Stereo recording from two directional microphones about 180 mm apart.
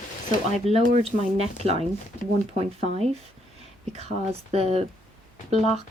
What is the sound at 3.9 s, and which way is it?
Speech, 35° right (ahead or behind).